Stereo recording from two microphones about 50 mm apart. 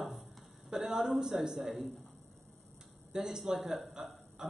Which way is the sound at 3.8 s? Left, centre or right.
Centre.